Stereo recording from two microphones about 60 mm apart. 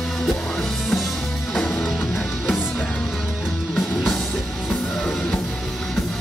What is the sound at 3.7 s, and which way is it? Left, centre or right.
Music, centre.